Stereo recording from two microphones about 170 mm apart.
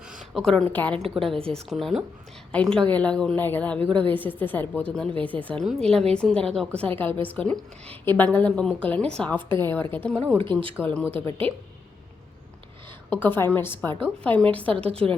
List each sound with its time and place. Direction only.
0.1 s a woman's voice: centre (ahead or behind)
10.4 s speech: 30° right (ahead or behind)
11.2 s a woman's voice: 10° left (ahead or behind)
13.1 s a woman's voice: 10° left (ahead or behind)
14.8 s speech: 35° right (ahead or behind)